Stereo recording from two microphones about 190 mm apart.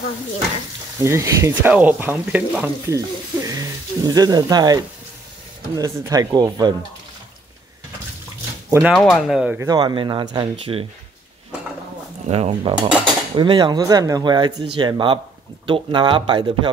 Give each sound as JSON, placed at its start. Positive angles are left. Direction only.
{"t": 0.9, "sound": "speech", "side_deg": -15}
{"t": 8.6, "sound": "speech", "side_deg": -15}
{"t": 8.9, "sound": "speech", "side_deg": 0}
{"t": 9.7, "sound": "speech", "side_deg": -20}
{"t": 12.3, "sound": "speech", "side_deg": -30}